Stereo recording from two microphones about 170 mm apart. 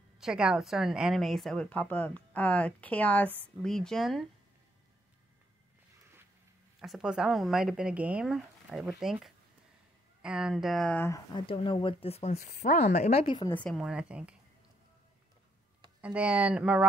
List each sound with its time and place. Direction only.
0.2 s a woman's voice: 5° right (ahead or behind)
6.8 s a woman's voice: 5° right (ahead or behind); by 11.4 s 20° left (ahead or behind)
11.4 s speech: 30° left (ahead or behind)
13.5 s a woman's voice: 5° left (ahead or behind)
16.0 s speech: 10° right (ahead or behind)